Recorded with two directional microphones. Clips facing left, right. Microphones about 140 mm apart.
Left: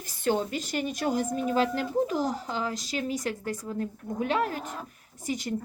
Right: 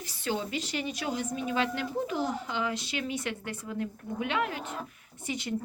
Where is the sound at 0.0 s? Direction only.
50° left (ahead or behind).